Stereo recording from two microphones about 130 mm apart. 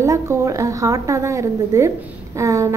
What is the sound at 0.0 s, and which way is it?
A woman's voice, 25° right (ahead or behind).